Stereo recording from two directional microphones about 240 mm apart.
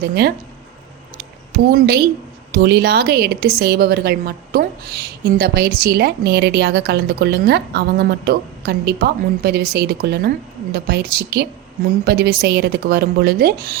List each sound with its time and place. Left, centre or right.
0.0 s speech: right
1.5 s speech: right